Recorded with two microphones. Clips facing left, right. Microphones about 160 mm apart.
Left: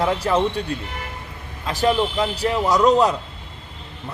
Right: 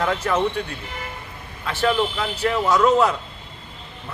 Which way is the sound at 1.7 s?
40° left (ahead or behind).